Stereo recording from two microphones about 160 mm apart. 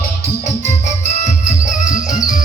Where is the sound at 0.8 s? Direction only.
50° left (ahead or behind).